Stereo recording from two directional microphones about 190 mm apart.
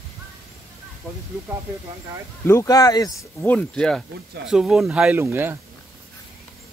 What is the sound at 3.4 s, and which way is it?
Speech, 5° left (ahead or behind).